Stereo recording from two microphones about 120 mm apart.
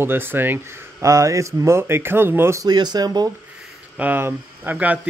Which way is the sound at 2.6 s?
35° right (ahead or behind).